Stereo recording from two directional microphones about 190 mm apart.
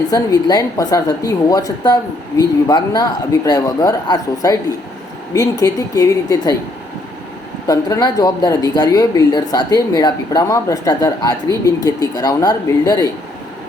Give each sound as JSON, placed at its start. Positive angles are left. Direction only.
{"t": 0.1, "sound": "speech", "side_deg": 20}
{"t": 7.7, "sound": "speech", "side_deg": 20}